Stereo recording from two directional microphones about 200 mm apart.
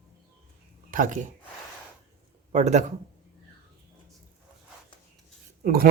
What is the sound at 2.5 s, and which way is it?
Speech, 35° right (ahead or behind).